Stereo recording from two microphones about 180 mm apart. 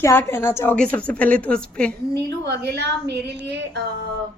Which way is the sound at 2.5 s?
65° right (ahead or behind).